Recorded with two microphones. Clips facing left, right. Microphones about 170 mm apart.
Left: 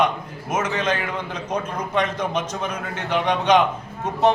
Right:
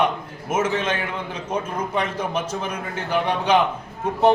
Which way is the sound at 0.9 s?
30° right (ahead or behind).